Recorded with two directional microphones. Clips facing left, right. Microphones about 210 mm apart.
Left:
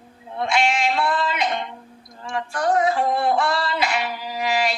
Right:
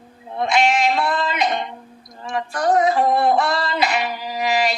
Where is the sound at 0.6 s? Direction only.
40° right (ahead or behind).